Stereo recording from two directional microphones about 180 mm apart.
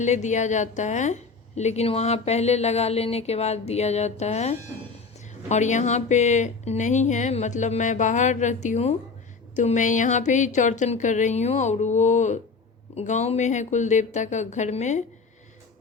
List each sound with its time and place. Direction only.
0.0 s a woman's voice: 40° left (ahead or behind)